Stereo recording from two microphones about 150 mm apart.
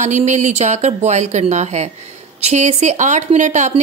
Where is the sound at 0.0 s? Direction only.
50° right (ahead or behind).